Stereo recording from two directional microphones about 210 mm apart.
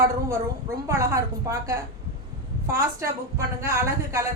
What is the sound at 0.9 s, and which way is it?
A woman's voice, 15° right (ahead or behind).